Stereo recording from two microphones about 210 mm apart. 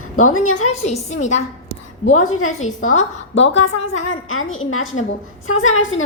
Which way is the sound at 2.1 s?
90° left.